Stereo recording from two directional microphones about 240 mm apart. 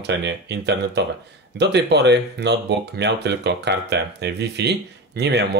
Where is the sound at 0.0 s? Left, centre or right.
Right.